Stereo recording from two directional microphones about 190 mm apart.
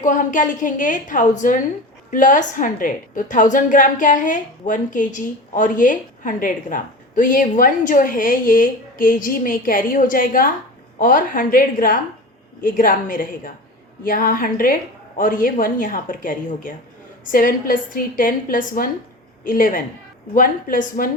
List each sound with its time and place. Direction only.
0.0 s a woman's voice: 40° left (ahead or behind)